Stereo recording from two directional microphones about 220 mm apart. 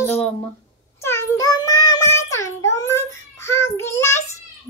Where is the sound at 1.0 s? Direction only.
10° left (ahead or behind).